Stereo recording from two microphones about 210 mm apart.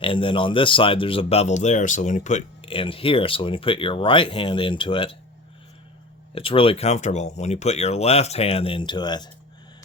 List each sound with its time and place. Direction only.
0.0 s speech: 25° left (ahead or behind)
6.3 s speech: 25° left (ahead or behind)